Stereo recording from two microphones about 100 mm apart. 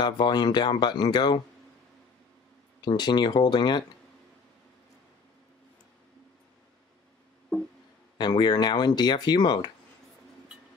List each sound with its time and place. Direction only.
0.0 s speech: 45° left (ahead or behind)
2.8 s speech: 45° left (ahead or behind)
8.2 s speech: 45° left (ahead or behind)